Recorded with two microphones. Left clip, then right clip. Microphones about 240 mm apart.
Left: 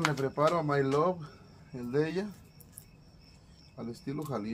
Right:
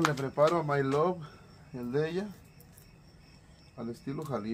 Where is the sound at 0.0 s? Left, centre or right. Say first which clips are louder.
Right 2 dB; right.